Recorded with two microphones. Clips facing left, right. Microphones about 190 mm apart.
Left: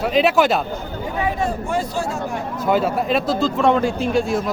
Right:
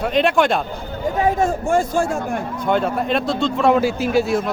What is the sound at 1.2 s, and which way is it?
Speech, 45° right (ahead or behind).